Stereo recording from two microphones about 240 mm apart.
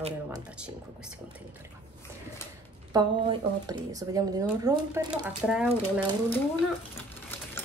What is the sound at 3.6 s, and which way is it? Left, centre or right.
Speech, centre.